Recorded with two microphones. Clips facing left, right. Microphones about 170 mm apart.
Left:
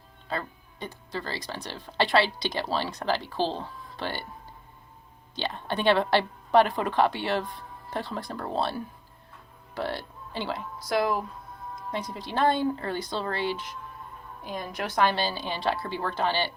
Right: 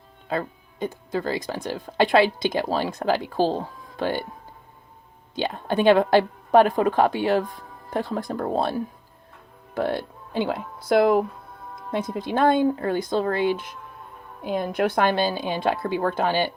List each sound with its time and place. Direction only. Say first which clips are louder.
0.3 s speech: right 6 dB; 50° right (ahead or behind)
5.3 s speech: right 6 dB; 45° right (ahead or behind)